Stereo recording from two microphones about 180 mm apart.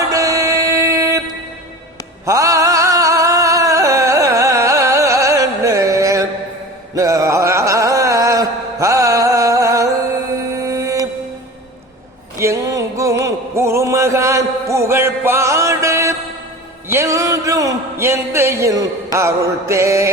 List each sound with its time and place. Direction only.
0.1 s music: 20° right (ahead or behind)
2.2 s music: 20° right (ahead or behind)
6.9 s a sound: 20° right (ahead or behind)
10.5 s music: 20° right (ahead or behind)
12.4 s music: 15° right (ahead or behind)
16.9 s a sound: 15° right (ahead or behind)